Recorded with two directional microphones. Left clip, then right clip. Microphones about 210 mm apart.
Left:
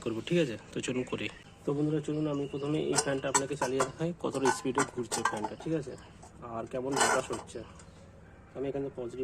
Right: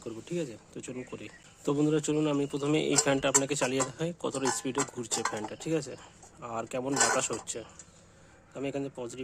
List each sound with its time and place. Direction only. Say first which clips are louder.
0.0 s speech: left 6 dB; centre (ahead or behind)
1.6 s speech: right 4 dB; 45° right (ahead or behind)
3.9 s dishes: even; 20° right (ahead or behind)
5.3 s speech: right 1 dB; 30° right (ahead or behind)